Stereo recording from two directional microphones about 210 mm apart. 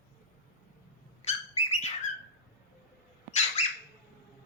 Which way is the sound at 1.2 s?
30° left (ahead or behind).